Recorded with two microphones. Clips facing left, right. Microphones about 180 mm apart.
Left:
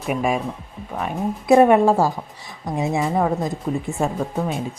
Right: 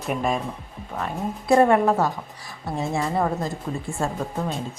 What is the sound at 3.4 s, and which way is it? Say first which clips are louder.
Speech: left 5 dB; 20° left (ahead or behind).